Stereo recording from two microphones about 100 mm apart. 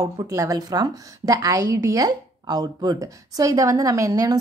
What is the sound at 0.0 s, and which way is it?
A woman's voice, 35° right (ahead or behind).